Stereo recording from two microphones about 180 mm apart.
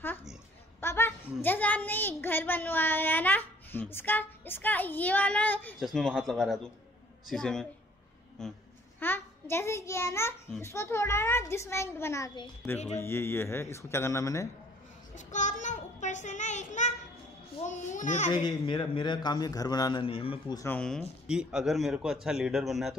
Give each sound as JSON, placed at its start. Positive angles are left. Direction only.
{"t": 0.7, "sound": "a woman's voice", "side_deg": 15}
{"t": 15.1, "sound": "a child's voice", "side_deg": 45}
{"t": 18.3, "sound": "a man's voice", "side_deg": 25}
{"t": 20.5, "sound": "a woman's voice", "side_deg": 10}
{"t": 21.0, "sound": "speech", "side_deg": -5}